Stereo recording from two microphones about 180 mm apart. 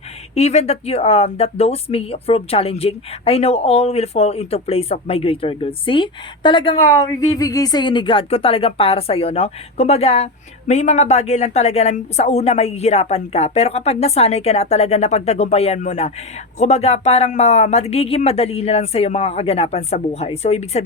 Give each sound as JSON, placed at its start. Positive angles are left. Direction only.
{"t": 0.3, "sound": "speech", "side_deg": 35}